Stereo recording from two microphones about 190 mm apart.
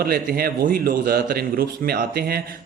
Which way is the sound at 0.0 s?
50° right (ahead or behind).